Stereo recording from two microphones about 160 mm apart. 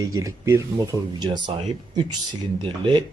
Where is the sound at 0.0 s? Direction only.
20° right (ahead or behind).